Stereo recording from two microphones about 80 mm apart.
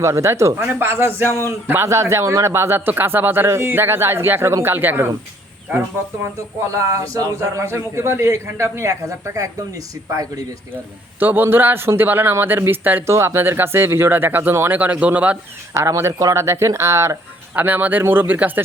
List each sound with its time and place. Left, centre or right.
0.0 s speech: right
0.6 s speech: right
6.7 s speech: right
11.2 s speech: right
13.1 s speech: right; by 15.4 s centre
15.7 s speech: right
17.5 s speech: right